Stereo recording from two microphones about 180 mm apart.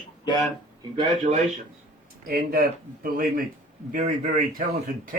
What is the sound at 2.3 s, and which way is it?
Speech, 55° right (ahead or behind).